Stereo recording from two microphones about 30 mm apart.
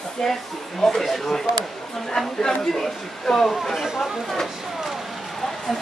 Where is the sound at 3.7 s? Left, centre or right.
Centre.